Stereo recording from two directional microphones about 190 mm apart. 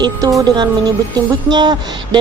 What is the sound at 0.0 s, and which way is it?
Speech, 20° right (ahead or behind).